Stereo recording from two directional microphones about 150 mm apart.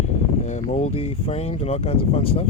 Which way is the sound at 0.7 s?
40° left (ahead or behind).